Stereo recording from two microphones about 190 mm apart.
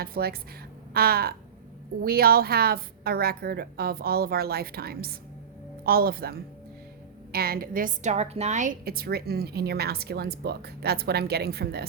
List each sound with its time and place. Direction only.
0.0 s a woman's voice: 55° right (ahead or behind)